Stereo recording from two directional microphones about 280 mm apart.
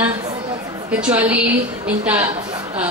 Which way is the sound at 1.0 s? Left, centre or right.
Centre.